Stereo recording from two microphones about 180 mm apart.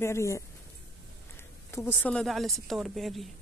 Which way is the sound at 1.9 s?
5° left (ahead or behind).